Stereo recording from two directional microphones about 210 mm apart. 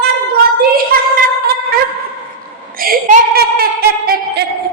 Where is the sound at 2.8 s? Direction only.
45° right (ahead or behind).